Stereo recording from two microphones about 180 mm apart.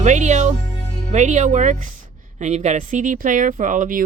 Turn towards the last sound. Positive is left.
turn(degrees=-50)  # may be behind; listen again after turning